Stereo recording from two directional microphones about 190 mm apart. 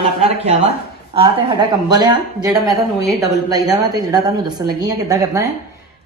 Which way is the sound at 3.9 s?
20° right (ahead or behind).